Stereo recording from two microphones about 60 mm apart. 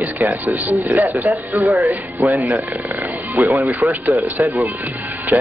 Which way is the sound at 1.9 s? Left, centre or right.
Right.